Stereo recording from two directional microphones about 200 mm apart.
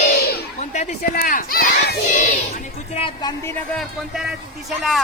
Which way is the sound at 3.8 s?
Centre (ahead or behind).